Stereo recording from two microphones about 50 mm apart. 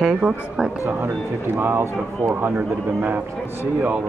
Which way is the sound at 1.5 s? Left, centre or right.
Right.